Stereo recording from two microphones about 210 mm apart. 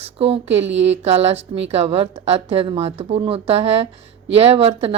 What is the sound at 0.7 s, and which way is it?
Speech, 60° right (ahead or behind).